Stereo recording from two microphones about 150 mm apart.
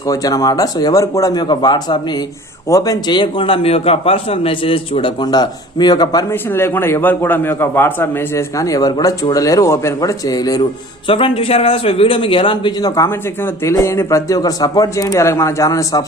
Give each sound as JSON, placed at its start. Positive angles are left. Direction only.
{"t": 0.1, "sound": "a man's voice", "side_deg": 25}
{"t": 6.3, "sound": "a man's voice", "side_deg": 15}
{"t": 13.1, "sound": "a man's voice", "side_deg": 15}